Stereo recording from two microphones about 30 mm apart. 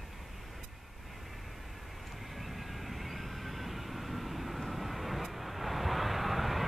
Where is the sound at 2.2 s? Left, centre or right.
Centre.